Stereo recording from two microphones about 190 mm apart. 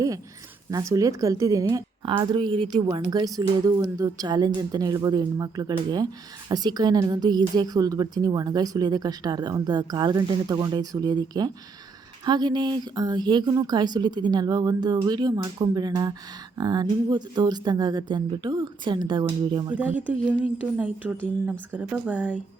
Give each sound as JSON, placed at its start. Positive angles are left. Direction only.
{"t": 0.7, "sound": "a woman's voice", "side_deg": -15}
{"t": 20.0, "sound": "a woman's voice", "side_deg": -5}